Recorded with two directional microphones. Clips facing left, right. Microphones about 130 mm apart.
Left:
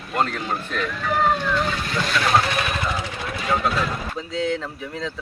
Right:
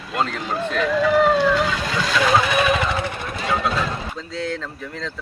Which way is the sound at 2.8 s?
65° right (ahead or behind).